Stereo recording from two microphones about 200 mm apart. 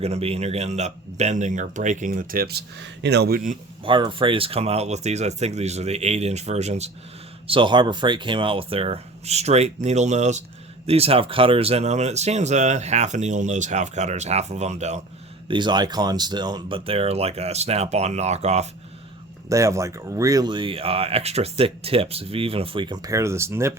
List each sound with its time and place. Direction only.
0.0 s speech: 30° right (ahead or behind)
3.8 s speech: 25° right (ahead or behind)
15.4 s speech: 25° right (ahead or behind)
19.5 s speech: 15° right (ahead or behind)